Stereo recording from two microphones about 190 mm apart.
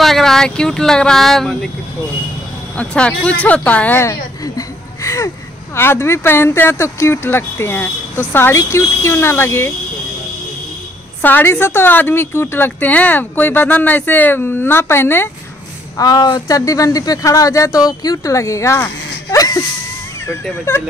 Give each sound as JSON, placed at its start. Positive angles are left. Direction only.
{"t": 0.0, "sound": "speech", "side_deg": 0}
{"t": 2.8, "sound": "a woman's voice", "side_deg": 5}
{"t": 11.2, "sound": "a woman's voice", "side_deg": 10}